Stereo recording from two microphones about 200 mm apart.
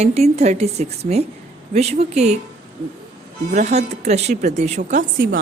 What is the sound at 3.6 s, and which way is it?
A woman's voice, 35° right (ahead or behind).